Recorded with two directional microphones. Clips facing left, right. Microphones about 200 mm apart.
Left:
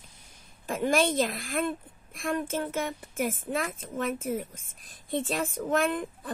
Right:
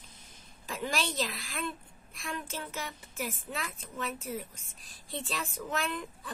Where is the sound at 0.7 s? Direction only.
50° left (ahead or behind).